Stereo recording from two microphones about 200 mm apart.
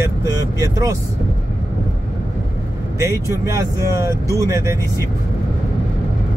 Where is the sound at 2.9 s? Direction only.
15° right (ahead or behind).